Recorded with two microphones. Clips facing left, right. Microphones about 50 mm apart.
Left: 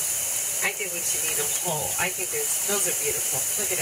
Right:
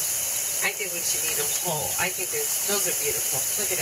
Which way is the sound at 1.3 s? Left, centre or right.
Left.